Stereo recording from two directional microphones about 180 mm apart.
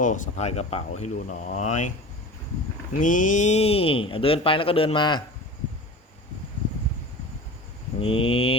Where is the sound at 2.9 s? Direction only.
45° left (ahead or behind); by 5.2 s 25° left (ahead or behind).